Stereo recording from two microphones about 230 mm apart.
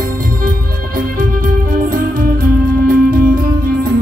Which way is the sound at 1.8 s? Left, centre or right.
Right.